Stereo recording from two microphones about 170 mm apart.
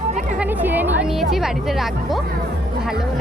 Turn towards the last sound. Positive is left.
turn(degrees=-5)  # may be behind; listen again after turning